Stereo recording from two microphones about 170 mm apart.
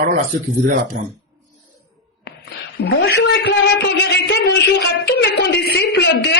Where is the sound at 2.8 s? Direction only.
70° left (ahead or behind).